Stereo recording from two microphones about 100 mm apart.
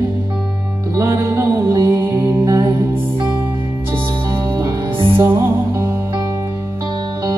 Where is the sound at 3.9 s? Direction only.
45° right (ahead or behind).